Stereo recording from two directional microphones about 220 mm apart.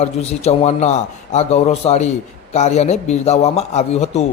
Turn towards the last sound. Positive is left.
turn(degrees=30)  # may be behind; listen again after turning